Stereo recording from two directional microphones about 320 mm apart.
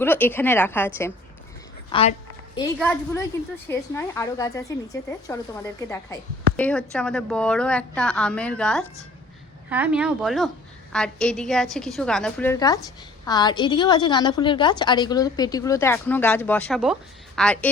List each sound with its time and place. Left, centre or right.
0.0 s a woman's voice: centre
1.9 s a woman's voice: centre
2.7 s a woman's voice: centre
6.6 s a woman's voice: centre